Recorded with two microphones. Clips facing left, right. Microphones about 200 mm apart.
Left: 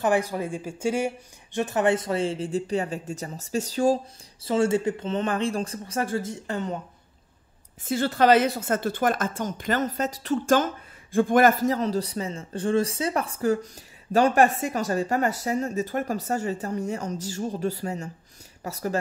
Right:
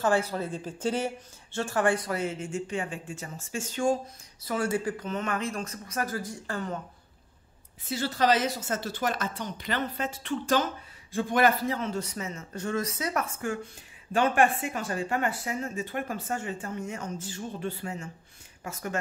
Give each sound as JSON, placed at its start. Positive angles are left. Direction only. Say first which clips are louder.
{"t": 0.0, "sound": "speech", "louder": "left 3 dB", "side_deg": 15}
{"t": 7.8, "sound": "a woman's voice", "louder": "left 5 dB", "side_deg": 55}